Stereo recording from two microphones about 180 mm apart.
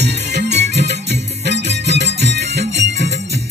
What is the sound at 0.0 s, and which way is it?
Music, 65° right (ahead or behind).